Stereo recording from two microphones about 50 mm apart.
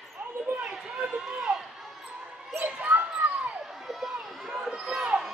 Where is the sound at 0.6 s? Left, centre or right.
Centre.